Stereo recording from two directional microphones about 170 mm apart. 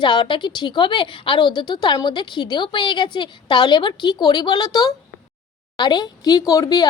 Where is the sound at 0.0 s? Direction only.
25° left (ahead or behind).